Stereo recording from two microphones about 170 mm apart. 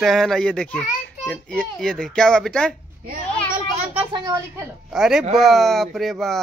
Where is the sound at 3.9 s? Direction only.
30° right (ahead or behind).